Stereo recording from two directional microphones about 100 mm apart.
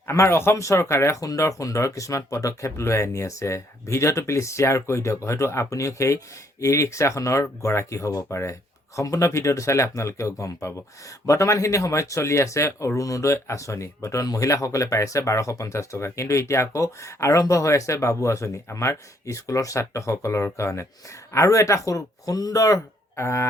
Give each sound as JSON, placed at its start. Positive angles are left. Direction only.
{"t": 0.1, "sound": "speech", "side_deg": 25}